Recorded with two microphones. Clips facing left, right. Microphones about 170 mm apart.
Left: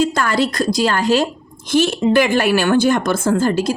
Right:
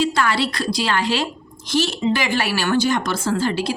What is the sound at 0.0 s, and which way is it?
A woman's voice, 45° left (ahead or behind).